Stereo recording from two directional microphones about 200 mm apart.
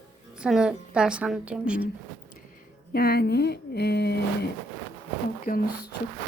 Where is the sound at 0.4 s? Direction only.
5° right (ahead or behind).